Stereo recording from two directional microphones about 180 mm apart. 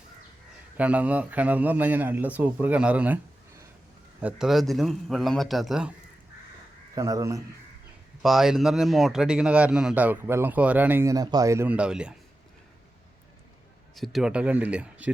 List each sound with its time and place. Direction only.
0.8 s a man's voice: 10° right (ahead or behind)
4.2 s a man's voice: 5° right (ahead or behind)
6.9 s speech: 20° right (ahead or behind)
8.2 s a man's voice: centre (ahead or behind)
13.9 s a man's voice: centre (ahead or behind)